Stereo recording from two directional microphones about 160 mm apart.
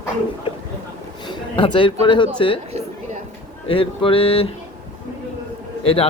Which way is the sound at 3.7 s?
35° left (ahead or behind).